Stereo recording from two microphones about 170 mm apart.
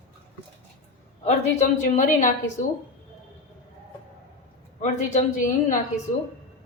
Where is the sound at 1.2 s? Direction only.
45° left (ahead or behind).